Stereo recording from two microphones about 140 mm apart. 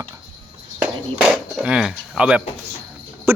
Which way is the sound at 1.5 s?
5° right (ahead or behind).